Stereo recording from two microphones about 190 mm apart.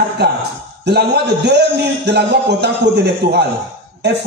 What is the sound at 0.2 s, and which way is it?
A man's voice, 60° right (ahead or behind).